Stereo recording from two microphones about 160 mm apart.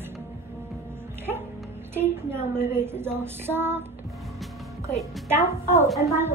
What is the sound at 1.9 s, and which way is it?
Female singing, 15° right (ahead or behind).